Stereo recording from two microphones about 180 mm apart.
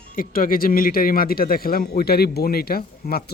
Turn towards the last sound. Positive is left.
turn(degrees=55)  # may be behind; listen again after turning